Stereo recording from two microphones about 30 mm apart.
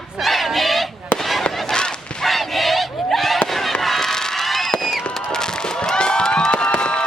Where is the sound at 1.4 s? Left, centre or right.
Left.